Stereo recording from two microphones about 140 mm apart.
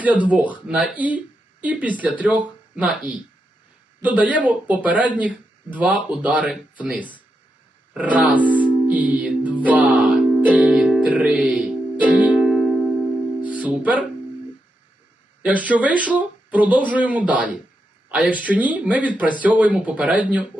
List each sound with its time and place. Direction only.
0.0 s speech: 10° right (ahead or behind)
7.9 s music: 10° right (ahead or behind)
13.4 s music: 10° right (ahead or behind)
15.4 s speech: 10° right (ahead or behind)